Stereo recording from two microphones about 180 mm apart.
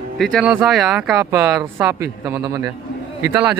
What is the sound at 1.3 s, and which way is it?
Speech, 15° right (ahead or behind).